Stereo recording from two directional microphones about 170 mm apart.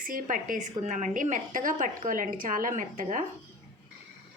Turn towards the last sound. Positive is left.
turn(degrees=-50)  # may be behind; listen again after turning